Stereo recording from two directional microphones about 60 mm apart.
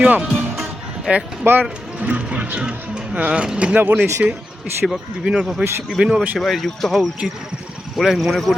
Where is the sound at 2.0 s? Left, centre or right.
Right.